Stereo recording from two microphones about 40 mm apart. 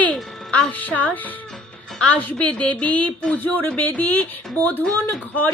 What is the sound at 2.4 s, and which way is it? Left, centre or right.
Speech, left.